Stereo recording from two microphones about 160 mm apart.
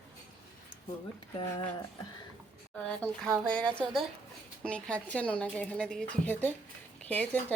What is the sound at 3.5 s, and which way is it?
A woman's voice, 5° left (ahead or behind).